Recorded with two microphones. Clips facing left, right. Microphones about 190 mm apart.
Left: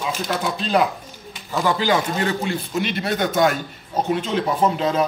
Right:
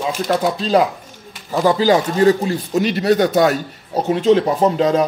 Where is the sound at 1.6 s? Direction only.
35° right (ahead or behind).